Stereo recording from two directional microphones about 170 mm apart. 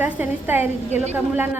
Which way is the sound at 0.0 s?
10° right (ahead or behind).